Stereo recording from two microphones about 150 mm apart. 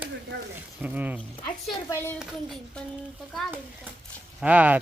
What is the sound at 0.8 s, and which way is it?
Speech, 10° right (ahead or behind).